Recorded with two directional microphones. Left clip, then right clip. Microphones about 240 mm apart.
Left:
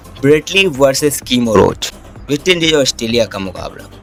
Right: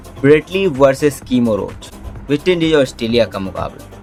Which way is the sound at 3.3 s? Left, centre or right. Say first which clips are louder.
Even; left.